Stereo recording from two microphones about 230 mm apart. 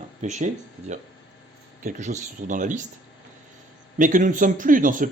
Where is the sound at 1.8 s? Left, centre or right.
Right.